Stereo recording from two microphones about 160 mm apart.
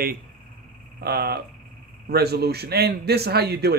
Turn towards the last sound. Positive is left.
turn(degrees=-85)